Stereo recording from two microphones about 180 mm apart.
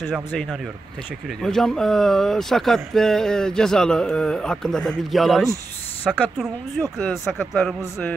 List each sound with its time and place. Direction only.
0.1 s speech: centre (ahead or behind)